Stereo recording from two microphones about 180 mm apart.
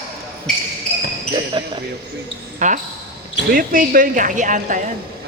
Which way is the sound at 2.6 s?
45° right (ahead or behind).